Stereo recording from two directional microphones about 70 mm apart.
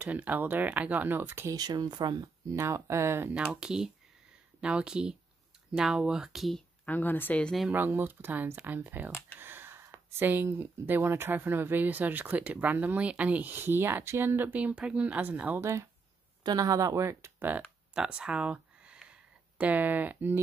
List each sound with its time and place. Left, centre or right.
0.0 s speech: right
1.5 s speech: right
2.5 s speech: right
3.5 s speech: centre
6.9 s speech: left
7.7 s speech: right
9.4 s a sound: right
10.2 s speech: right
15.6 s speech: right
16.4 s speech: right
17.9 s a sound: centre
19.6 s speech: right